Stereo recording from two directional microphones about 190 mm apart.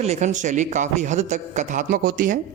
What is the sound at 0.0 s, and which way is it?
A man's voice, 35° right (ahead or behind).